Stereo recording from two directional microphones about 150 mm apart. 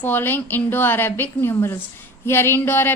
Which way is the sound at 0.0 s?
15° left (ahead or behind).